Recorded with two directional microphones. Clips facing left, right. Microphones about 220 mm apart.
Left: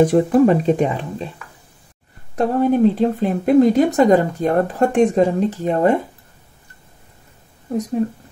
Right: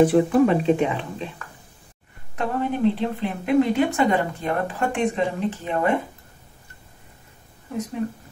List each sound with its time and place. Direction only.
0.0 s speech: 40° left (ahead or behind)
2.3 s speech: 45° left (ahead or behind)